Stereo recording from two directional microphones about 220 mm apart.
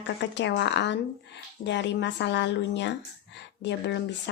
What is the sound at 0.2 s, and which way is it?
Speech, 55° left (ahead or behind).